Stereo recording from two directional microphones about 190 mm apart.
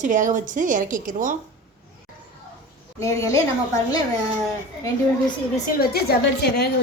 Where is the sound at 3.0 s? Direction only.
15° left (ahead or behind).